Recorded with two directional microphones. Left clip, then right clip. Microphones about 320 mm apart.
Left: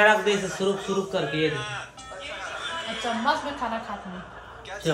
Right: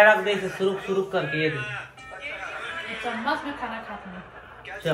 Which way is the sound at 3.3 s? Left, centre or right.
Centre.